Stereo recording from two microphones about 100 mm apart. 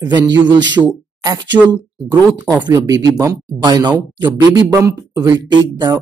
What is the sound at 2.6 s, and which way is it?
Speech, 40° right (ahead or behind).